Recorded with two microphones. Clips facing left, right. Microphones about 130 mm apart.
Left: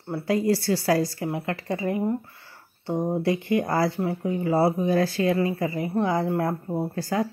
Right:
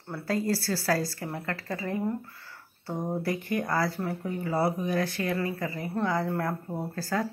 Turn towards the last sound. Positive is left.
turn(degrees=20)  # may be behind; listen again after turning